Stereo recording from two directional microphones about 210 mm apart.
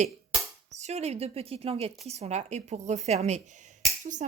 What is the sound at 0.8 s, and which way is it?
A woman's voice, 30° right (ahead or behind).